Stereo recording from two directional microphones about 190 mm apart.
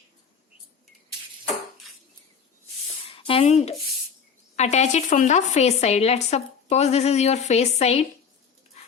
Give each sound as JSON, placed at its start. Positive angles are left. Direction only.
{"t": 3.1, "sound": "speech", "side_deg": 30}